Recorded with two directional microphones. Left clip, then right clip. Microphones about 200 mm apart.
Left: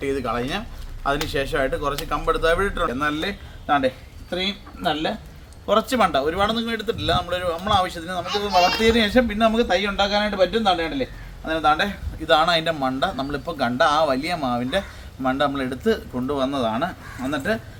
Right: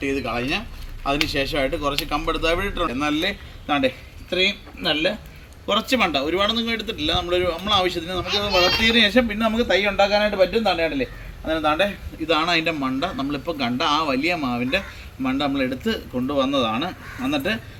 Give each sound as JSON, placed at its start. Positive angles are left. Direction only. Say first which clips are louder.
{"t": 0.0, "sound": "a man's voice", "louder": "even", "side_deg": 20}
{"t": 5.6, "sound": "a man's voice", "louder": "left 1 dB", "side_deg": 25}
{"t": 9.6, "sound": "a man's voice", "louder": "right 2 dB", "side_deg": 5}
{"t": 11.4, "sound": "a man's voice", "louder": "left 1 dB", "side_deg": 15}